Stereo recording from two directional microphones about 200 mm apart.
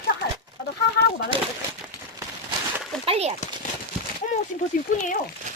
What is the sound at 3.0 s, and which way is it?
Speech, 30° right (ahead or behind).